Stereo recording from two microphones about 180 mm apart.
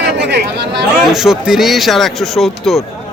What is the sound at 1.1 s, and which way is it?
Speech, 5° right (ahead or behind).